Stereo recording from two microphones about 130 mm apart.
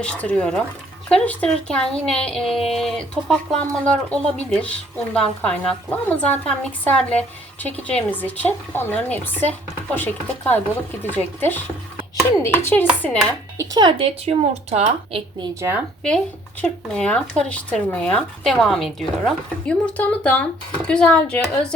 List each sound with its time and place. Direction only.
0.0 s speech: 10° left (ahead or behind)
13.7 s speech: 40° right (ahead or behind)
14.3 s speech: 55° right (ahead or behind)
16.0 s speech: 5° left (ahead or behind)